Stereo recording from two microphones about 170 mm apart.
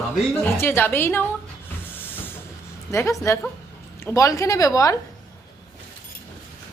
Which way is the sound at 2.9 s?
15° left (ahead or behind).